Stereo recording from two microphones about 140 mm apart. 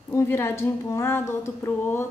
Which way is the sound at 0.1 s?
20° left (ahead or behind).